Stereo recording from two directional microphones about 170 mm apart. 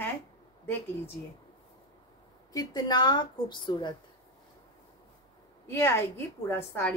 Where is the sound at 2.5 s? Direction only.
25° left (ahead or behind).